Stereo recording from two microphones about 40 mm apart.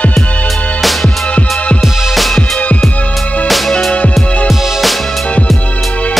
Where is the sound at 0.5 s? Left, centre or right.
Left.